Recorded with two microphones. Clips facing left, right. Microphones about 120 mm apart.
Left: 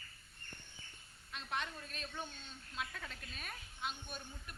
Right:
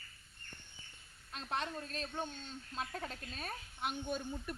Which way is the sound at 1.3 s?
35° right (ahead or behind).